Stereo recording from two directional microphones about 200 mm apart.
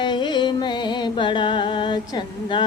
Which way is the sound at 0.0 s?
20° left (ahead or behind).